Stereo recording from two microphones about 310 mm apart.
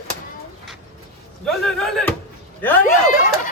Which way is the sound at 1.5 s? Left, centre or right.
Centre.